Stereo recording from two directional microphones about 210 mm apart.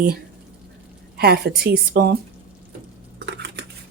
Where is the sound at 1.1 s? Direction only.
50° right (ahead or behind).